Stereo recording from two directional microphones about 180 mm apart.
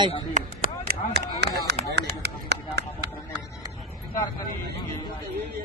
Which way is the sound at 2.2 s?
70° right (ahead or behind).